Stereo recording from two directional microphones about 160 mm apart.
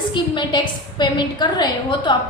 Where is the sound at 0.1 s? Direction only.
30° left (ahead or behind).